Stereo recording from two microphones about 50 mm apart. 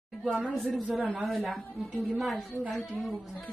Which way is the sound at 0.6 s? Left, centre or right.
Centre.